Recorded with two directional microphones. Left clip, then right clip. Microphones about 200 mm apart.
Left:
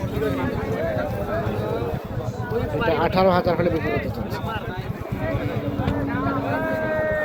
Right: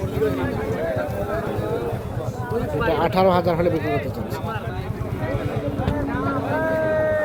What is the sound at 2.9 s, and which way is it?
Speech, 5° right (ahead or behind).